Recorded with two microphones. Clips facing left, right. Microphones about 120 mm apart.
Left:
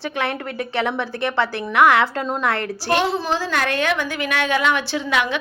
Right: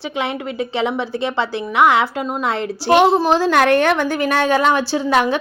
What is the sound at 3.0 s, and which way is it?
A woman's voice, 50° right (ahead or behind).